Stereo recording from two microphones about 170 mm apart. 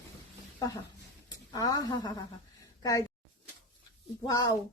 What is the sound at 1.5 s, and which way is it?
Speech, 20° left (ahead or behind).